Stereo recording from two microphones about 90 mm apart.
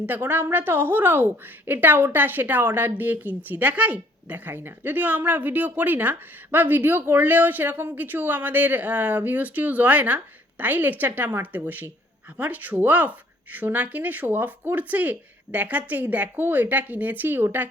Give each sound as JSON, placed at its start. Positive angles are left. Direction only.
{"t": 0.0, "sound": "a woman's voice", "side_deg": -20}